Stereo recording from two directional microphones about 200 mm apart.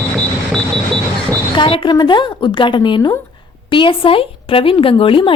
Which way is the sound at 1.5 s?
25° left (ahead or behind).